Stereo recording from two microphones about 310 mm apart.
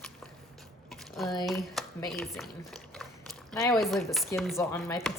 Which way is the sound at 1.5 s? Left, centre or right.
Centre.